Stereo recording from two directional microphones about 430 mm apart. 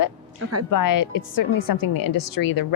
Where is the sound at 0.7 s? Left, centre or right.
Left.